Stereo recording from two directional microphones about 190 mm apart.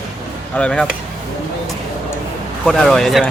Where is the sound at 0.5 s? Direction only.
5° left (ahead or behind).